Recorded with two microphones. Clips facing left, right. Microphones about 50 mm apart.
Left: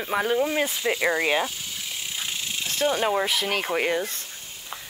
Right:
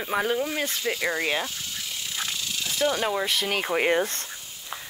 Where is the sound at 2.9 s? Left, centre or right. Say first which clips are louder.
Left 5 dB; centre.